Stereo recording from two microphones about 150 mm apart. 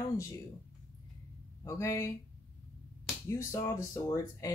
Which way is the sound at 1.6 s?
20° left (ahead or behind).